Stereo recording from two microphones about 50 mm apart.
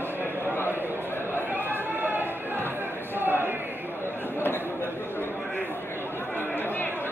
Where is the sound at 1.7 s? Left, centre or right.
Right.